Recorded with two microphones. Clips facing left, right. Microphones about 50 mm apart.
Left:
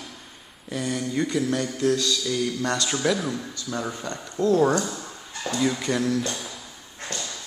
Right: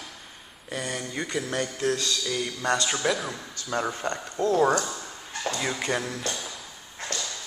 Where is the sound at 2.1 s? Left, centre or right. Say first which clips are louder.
Left 4 dB; centre.